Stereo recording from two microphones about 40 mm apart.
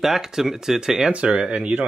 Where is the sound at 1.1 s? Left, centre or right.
Right.